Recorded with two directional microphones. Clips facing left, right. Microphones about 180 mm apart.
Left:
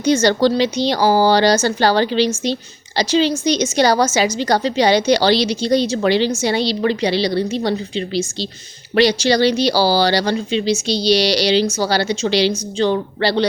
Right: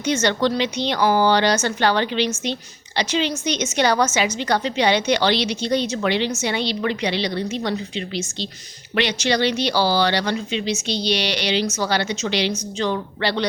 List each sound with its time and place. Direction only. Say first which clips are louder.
0.0 s speech: left 6 dB; 35° left (ahead or behind)